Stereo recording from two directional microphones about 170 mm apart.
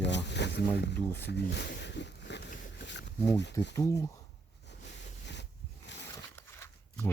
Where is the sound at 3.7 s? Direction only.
20° left (ahead or behind).